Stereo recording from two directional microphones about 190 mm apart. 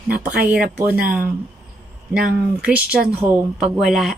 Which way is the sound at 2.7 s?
5° right (ahead or behind).